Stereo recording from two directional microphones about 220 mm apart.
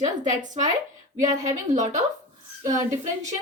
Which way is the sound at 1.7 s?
35° right (ahead or behind).